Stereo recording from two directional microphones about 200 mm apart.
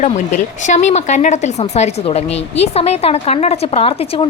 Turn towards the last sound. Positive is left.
turn(degrees=30)  # may be behind; listen again after turning